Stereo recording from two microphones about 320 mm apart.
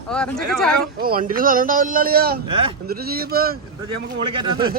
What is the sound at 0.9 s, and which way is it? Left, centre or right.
Speech, right.